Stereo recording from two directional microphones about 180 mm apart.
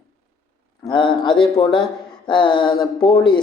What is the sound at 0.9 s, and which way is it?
Speech, 25° left (ahead or behind).